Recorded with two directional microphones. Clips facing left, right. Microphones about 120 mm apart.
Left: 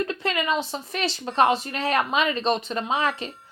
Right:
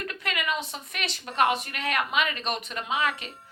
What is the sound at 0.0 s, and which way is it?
A woman's voice, 30° left (ahead or behind).